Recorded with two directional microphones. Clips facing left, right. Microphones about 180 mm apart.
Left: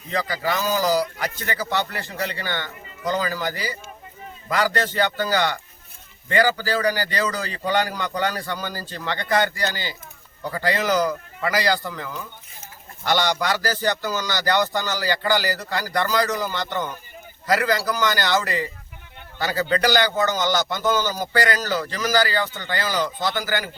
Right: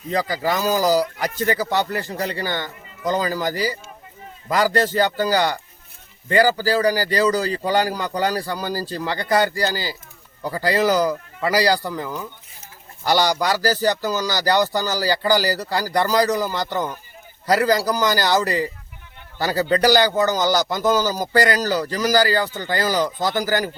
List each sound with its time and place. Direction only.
0.1 s a man's voice: 40° right (ahead or behind)
13.1 s a man's voice: 35° right (ahead or behind)